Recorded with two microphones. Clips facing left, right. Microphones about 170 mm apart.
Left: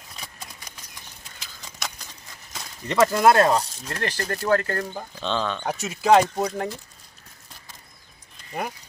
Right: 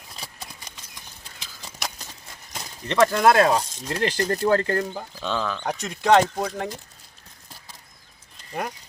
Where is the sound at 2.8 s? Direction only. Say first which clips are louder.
Even; 5° left (ahead or behind).